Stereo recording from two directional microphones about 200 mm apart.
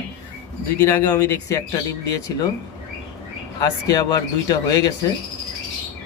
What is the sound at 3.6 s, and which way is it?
Speech, 15° left (ahead or behind).